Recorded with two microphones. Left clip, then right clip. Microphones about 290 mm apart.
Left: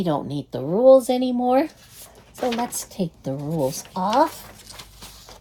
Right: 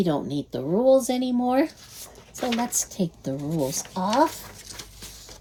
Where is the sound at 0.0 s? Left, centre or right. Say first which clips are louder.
Left 1 dB; left.